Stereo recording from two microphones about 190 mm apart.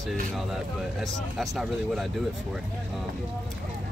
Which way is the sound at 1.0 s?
Centre (ahead or behind).